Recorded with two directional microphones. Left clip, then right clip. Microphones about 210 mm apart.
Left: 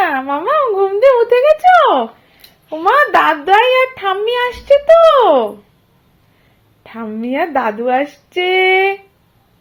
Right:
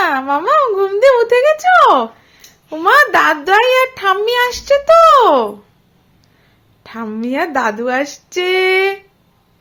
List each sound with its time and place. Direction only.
0.0 s a sound: 15° right (ahead or behind)
2.7 s a child's voice: 25° right (ahead or behind)
6.8 s a woman's voice: 15° right (ahead or behind)